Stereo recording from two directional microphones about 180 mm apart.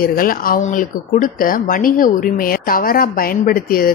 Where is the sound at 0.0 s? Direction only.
55° left (ahead or behind).